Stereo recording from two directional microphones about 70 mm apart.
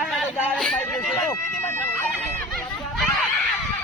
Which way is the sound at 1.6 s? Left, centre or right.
Left.